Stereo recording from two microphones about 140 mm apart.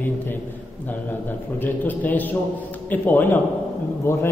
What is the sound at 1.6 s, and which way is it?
A man's voice, 15° left (ahead or behind).